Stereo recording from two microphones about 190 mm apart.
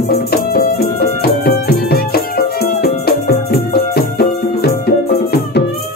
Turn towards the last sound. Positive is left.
turn(degrees=55)  # may be behind; listen again after turning